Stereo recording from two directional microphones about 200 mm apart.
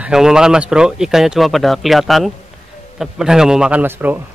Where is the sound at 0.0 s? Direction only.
5° right (ahead or behind).